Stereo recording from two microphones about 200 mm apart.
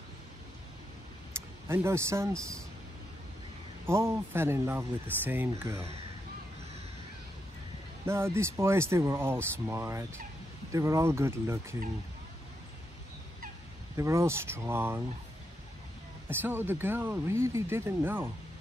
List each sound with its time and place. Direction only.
1.3 s a sound: 15° right (ahead or behind)
1.7 s speech: 10° right (ahead or behind)
3.8 s speech: 15° right (ahead or behind)
8.0 s speech: 10° right (ahead or behind)
13.9 s speech: 15° right (ahead or behind)
16.3 s speech: 10° right (ahead or behind)